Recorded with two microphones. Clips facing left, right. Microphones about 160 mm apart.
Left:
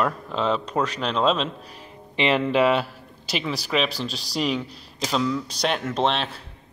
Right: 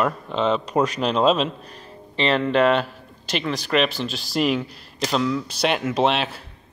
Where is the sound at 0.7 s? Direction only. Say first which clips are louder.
Right 4 dB; 15° right (ahead or behind).